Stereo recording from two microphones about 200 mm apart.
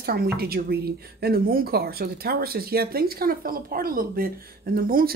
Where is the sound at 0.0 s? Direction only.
50° right (ahead or behind).